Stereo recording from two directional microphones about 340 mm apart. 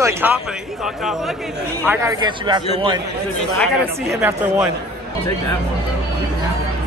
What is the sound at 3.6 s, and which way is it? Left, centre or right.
Speech, centre.